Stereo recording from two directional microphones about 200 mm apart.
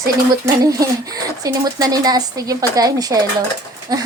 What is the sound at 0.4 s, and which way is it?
Speech, 15° right (ahead or behind).